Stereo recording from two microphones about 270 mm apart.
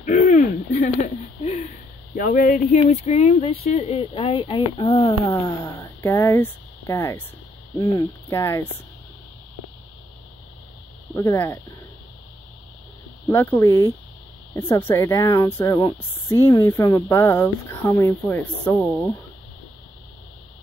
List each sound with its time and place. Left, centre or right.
0.0 s owl: left
0.8 s speech: left; by 8.6 s centre
11.1 s speech: centre
13.3 s speech: centre